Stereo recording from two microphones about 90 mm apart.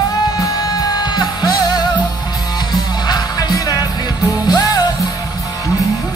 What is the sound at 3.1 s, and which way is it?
Music, 50° left (ahead or behind).